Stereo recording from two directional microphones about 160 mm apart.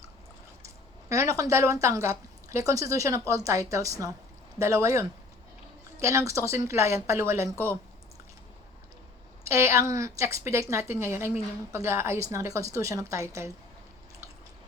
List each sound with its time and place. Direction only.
1.1 s a woman's voice: 20° right (ahead or behind)
9.5 s a woman's voice: 15° right (ahead or behind)